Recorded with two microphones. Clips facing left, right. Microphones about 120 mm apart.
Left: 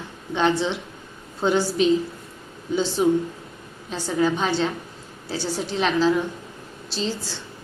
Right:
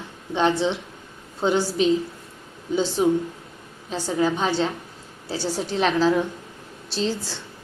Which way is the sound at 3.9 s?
35° right (ahead or behind).